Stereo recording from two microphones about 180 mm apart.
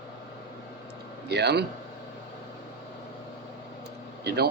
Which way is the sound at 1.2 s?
65° right (ahead or behind).